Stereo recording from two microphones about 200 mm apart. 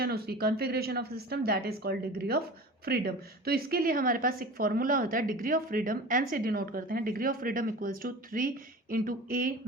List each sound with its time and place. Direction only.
0.0 s a woman's voice: 50° right (ahead or behind)